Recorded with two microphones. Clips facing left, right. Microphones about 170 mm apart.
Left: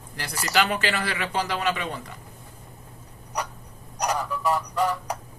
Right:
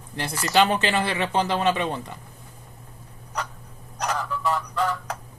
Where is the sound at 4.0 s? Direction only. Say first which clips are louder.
Left 1 dB; 15° left (ahead or behind).